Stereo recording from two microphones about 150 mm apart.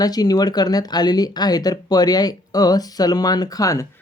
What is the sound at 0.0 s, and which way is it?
Speech, 25° left (ahead or behind).